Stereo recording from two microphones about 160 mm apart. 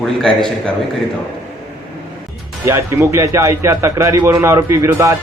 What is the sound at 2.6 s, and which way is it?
Speech, 15° right (ahead or behind).